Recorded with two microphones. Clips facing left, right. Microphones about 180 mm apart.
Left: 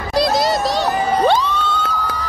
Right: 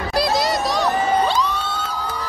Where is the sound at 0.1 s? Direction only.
25° left (ahead or behind).